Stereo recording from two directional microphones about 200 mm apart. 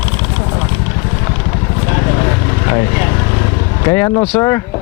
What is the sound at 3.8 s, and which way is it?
Speech, 15° left (ahead or behind).